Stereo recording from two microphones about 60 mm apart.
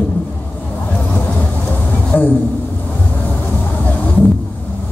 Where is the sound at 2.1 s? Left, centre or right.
Left.